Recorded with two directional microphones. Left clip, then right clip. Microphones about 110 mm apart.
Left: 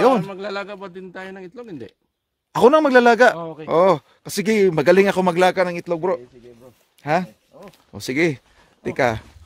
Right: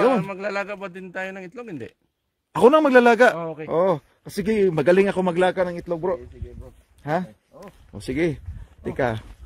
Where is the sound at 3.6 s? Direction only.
40° left (ahead or behind).